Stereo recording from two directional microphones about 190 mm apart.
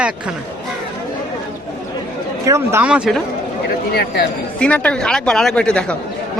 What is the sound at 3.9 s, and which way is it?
Speech, 55° left (ahead or behind).